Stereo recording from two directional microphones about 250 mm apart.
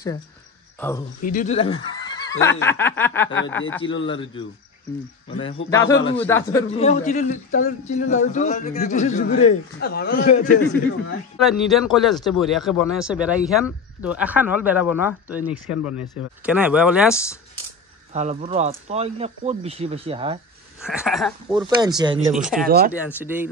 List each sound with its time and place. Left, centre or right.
0.7 s speech: centre
1.2 s speech: left
2.4 s snicker: centre
3.3 s speech: left
5.4 s speech: left
6.1 s snicker: centre
6.7 s speech: left
11.3 s a man's voice: centre
18.1 s speech: right
20.8 s a man's voice: centre
21.5 s speech: centre
22.3 s a man's voice: centre
22.7 s speech: right
23.0 s speech: centre